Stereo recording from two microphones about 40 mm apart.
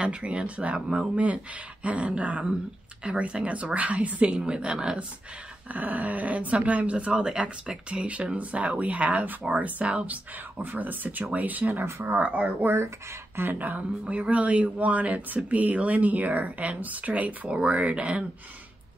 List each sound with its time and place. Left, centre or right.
0.0 s speech: right
4.3 s speech: right
5.7 s speech: right
10.6 s speech: right
12.6 s speech: right
13.6 s speech: right
14.0 s speech: right